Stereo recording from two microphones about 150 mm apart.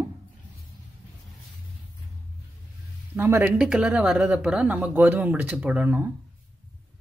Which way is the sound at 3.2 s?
15° right (ahead or behind).